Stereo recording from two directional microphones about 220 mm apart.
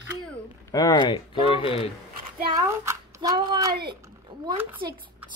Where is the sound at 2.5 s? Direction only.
15° right (ahead or behind).